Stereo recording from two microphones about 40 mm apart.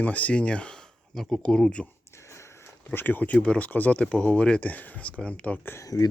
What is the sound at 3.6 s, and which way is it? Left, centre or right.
Speech, left.